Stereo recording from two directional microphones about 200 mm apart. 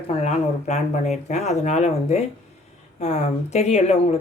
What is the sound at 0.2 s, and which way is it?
Speech, 35° left (ahead or behind).